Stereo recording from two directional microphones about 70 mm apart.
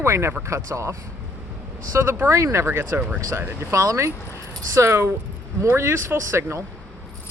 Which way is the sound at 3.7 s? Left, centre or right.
Right.